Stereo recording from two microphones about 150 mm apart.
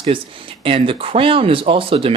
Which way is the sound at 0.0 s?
35° right (ahead or behind).